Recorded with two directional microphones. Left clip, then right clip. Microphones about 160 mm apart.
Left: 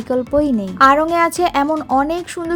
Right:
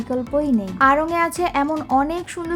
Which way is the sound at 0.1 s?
25° left (ahead or behind).